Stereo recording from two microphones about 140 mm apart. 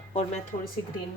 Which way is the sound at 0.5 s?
55° left (ahead or behind).